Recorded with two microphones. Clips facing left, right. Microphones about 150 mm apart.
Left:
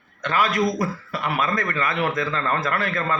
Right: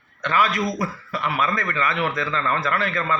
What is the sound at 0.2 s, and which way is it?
A man's voice, 45° left (ahead or behind).